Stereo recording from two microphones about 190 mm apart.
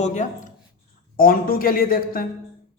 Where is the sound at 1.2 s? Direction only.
50° left (ahead or behind).